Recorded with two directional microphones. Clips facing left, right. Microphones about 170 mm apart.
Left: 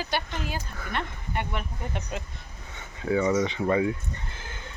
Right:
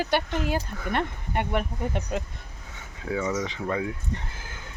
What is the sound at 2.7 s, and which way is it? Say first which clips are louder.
Speech: left 4 dB; centre (ahead or behind).